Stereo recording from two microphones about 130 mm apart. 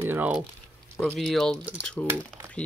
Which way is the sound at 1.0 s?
5° left (ahead or behind).